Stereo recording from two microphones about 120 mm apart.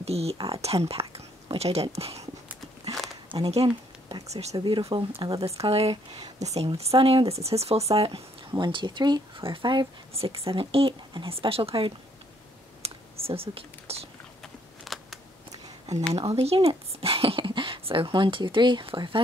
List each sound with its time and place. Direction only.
0.0 s speech: 60° right (ahead or behind)
3.3 s speech: 45° right (ahead or behind)
4.3 s speech: 65° right (ahead or behind)
4.6 s speech: 40° right (ahead or behind)
5.7 s speech: 55° right (ahead or behind)
8.5 s speech: 40° right (ahead or behind)
10.1 s speech: 50° right (ahead or behind)
12.8 s computer keyboard: 55° right (ahead or behind)
14.4 s a sound: centre (ahead or behind)
16.1 s speech: 55° right (ahead or behind)